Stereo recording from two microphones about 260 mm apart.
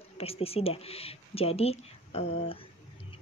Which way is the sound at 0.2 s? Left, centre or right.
Left.